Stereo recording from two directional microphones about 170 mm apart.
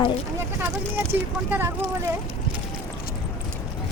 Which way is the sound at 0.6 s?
15° right (ahead or behind).